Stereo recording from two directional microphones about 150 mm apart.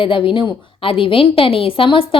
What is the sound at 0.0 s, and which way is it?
Speech, 35° left (ahead or behind).